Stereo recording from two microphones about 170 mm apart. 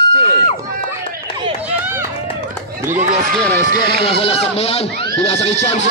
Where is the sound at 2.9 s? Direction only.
45° right (ahead or behind).